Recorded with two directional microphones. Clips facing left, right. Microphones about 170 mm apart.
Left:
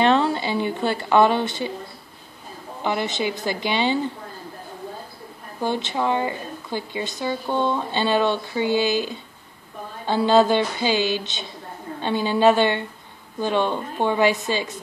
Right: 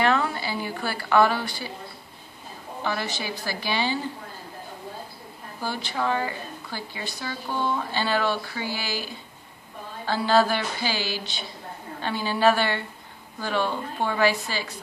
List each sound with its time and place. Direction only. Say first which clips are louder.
0.0 s a woman's voice: left 5 dB; 25° left (ahead or behind)
2.8 s speech: left 6 dB; 20° left (ahead or behind)
5.6 s speech: left 5 dB; 20° left (ahead or behind)